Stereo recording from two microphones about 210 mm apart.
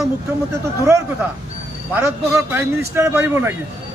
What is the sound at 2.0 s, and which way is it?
A man's voice, 10° right (ahead or behind).